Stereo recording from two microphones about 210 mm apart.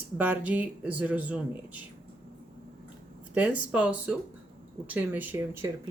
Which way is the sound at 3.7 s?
5° right (ahead or behind).